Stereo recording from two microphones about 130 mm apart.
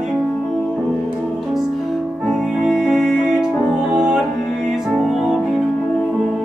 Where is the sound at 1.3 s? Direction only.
Centre (ahead or behind).